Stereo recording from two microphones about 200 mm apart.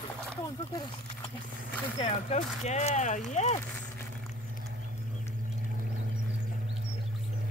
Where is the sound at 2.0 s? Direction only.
30° left (ahead or behind).